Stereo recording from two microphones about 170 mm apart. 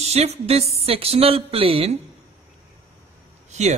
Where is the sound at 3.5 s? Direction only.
40° right (ahead or behind).